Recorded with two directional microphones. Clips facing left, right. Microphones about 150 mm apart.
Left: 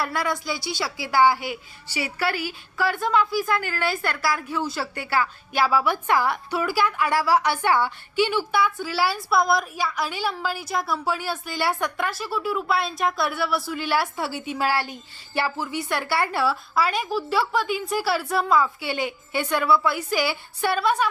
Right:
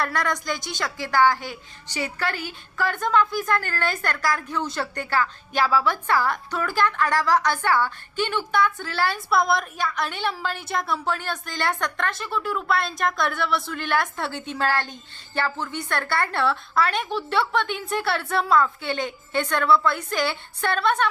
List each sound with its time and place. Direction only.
0.0 s a woman's voice: 5° left (ahead or behind)